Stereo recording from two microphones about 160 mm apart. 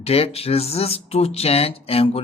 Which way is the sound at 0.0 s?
40° left (ahead or behind).